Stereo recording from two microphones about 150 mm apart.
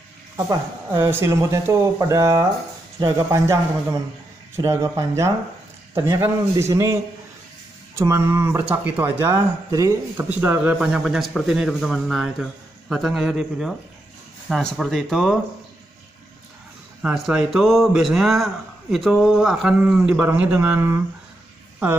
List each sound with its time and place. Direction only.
0.5 s speech: 15° right (ahead or behind)
4.6 s speech: 20° right (ahead or behind)
8.0 s a man's voice: 20° right (ahead or behind); by 15.3 s centre (ahead or behind)
17.0 s a man's voice: 5° right (ahead or behind)